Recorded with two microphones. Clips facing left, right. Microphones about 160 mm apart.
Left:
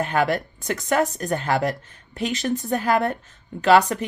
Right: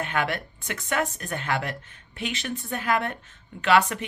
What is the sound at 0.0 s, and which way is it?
Speech, 40° left (ahead or behind).